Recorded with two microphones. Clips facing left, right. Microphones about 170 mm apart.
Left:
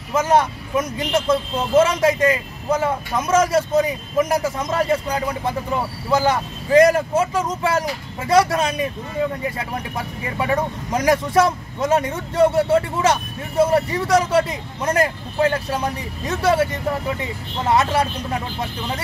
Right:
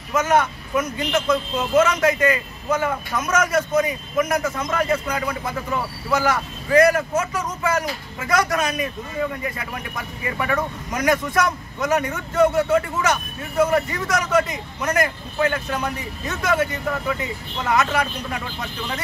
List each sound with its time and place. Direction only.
0.1 s speech: 30° left (ahead or behind)